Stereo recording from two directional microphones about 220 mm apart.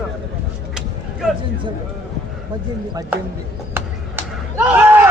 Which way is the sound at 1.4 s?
20° right (ahead or behind).